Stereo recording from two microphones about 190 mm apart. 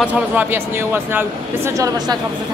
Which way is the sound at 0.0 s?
10° right (ahead or behind).